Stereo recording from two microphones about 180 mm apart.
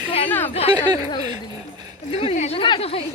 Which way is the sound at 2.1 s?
35° left (ahead or behind).